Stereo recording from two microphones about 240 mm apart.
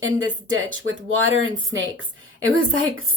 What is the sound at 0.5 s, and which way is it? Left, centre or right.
Speech, right.